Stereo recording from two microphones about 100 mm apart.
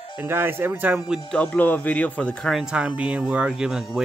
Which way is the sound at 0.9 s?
5° right (ahead or behind).